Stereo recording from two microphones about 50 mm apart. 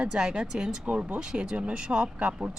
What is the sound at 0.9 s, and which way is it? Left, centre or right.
Speech, right.